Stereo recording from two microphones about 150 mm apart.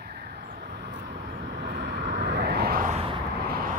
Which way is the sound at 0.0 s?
75° right (ahead or behind).